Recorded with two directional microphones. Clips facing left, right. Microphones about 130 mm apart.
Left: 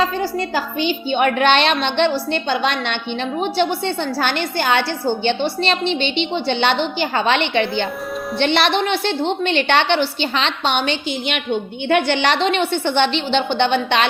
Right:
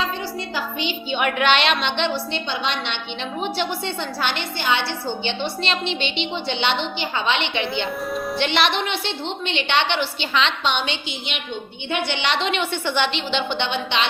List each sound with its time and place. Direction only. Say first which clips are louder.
0.2 s a woman's voice: left 6 dB; 45° left (ahead or behind)
6.5 s a woman's voice: left 5 dB; 45° left (ahead or behind)
12.7 s a woman's voice: left 5 dB; 30° left (ahead or behind); by 14.1 s 45° left (ahead or behind)